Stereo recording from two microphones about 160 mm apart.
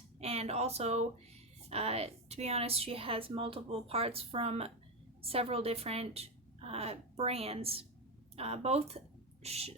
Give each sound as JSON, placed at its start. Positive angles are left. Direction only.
{"t": 0.2, "sound": "a woman's voice", "side_deg": -40}